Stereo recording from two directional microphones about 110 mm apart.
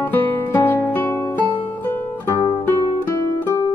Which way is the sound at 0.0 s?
20° left (ahead or behind).